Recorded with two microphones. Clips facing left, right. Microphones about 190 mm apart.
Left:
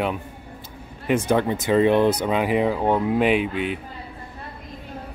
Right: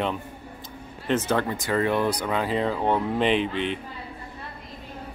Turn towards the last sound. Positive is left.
turn(degrees=5)  # may be behind; listen again after turning